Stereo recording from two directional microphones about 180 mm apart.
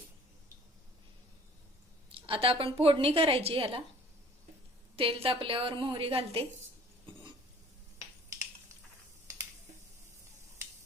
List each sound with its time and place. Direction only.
2.2 s a woman's voice: 30° right (ahead or behind)
4.9 s a woman's voice: 30° right (ahead or behind)